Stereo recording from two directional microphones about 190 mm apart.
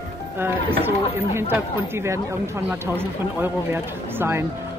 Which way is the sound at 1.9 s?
15° right (ahead or behind).